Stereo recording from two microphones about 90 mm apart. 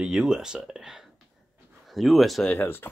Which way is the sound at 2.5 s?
25° left (ahead or behind).